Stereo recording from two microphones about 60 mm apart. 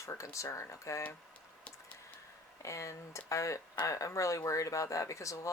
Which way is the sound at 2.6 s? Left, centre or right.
Left.